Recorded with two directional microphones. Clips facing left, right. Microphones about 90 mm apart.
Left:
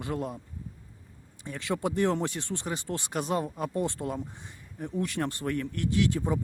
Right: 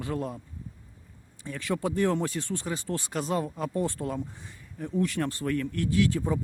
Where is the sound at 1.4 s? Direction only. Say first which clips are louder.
Right 1 dB; 20° left (ahead or behind).